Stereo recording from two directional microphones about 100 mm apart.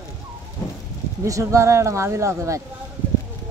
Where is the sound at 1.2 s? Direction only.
30° right (ahead or behind).